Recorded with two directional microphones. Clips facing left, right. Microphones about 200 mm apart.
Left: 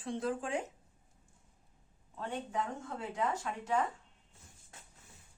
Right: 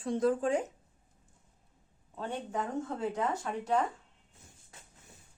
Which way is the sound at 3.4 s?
35° right (ahead or behind).